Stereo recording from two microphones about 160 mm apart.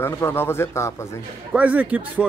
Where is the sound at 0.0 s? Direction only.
15° left (ahead or behind).